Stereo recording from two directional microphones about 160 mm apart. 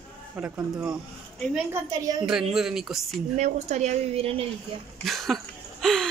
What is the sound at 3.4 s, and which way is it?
A woman's voice, 45° right (ahead or behind).